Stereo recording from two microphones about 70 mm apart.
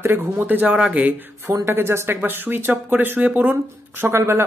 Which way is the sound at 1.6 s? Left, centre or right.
Right.